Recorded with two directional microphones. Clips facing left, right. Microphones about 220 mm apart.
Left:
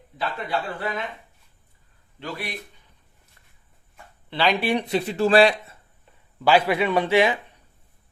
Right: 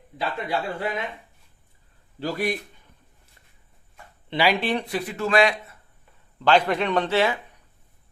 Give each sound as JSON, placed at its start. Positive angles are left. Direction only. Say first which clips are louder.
{"t": 0.2, "sound": "speech", "louder": "right 1 dB", "side_deg": -10}
{"t": 2.1, "sound": "speech", "louder": "right 7 dB", "side_deg": -40}
{"t": 4.3, "sound": "speech", "louder": "right 1 dB", "side_deg": -10}
{"t": 4.6, "sound": "speech", "louder": "left 3 dB", "side_deg": 15}
{"t": 6.4, "sound": "a man's voice", "louder": "left 1 dB", "side_deg": 10}